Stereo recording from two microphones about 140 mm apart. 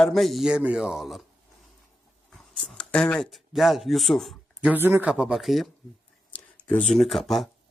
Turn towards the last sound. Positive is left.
turn(degrees=0)  # may be behind; listen again after turning